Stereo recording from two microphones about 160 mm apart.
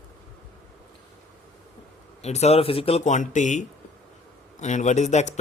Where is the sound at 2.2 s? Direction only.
40° left (ahead or behind).